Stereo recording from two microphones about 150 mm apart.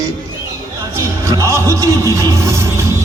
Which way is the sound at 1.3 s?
20° right (ahead or behind).